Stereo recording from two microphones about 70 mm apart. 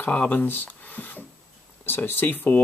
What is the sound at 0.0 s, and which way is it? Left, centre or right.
Speech, left.